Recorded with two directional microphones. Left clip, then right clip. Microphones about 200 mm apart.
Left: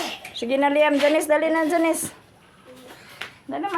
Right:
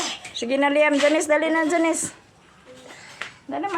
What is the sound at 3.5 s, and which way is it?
Speech, 25° left (ahead or behind).